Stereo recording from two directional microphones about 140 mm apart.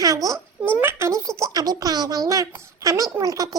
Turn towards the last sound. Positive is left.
turn(degrees=-25)  # may be behind; listen again after turning